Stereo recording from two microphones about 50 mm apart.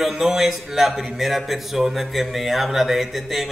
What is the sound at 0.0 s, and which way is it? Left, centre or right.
A man's voice, centre.